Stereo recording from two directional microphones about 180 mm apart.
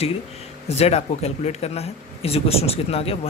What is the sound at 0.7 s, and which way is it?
Speech, 35° left (ahead or behind).